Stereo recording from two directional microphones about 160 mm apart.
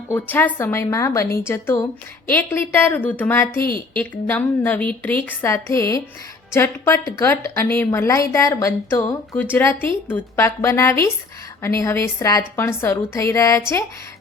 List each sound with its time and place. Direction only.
0.1 s a woman's voice: 10° left (ahead or behind)